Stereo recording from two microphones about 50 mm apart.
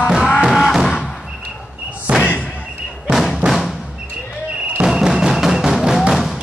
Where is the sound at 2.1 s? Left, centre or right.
Right.